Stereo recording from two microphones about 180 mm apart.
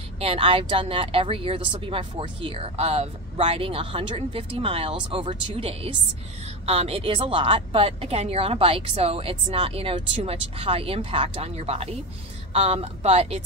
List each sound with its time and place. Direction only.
0.2 s speech: 30° right (ahead or behind)